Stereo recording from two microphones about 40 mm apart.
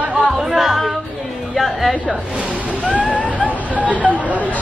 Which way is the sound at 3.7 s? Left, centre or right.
Right.